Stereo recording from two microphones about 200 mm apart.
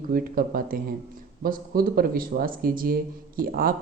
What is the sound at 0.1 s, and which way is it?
Speech, 45° right (ahead or behind).